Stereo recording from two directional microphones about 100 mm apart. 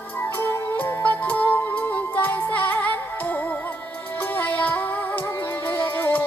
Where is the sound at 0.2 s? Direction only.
25° left (ahead or behind).